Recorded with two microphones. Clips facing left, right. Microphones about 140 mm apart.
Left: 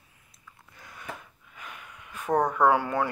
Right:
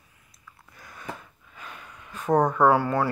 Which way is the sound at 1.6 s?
30° right (ahead or behind).